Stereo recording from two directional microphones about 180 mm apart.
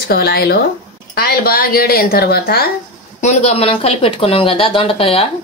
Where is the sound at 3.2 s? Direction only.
40° left (ahead or behind).